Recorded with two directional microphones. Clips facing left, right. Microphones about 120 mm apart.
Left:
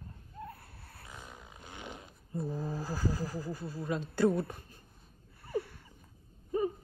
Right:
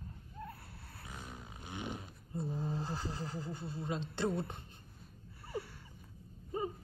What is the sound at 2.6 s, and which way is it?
A woman's voice, 25° right (ahead or behind).